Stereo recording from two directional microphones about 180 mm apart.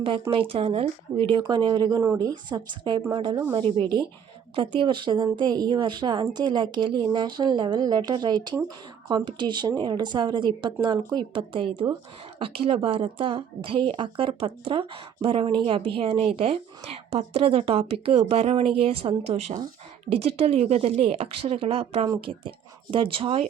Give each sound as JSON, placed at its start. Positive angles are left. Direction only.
{"t": 0.0, "sound": "a woman's voice", "side_deg": -30}